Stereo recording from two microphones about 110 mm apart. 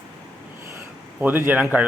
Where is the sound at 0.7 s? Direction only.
15° right (ahead or behind).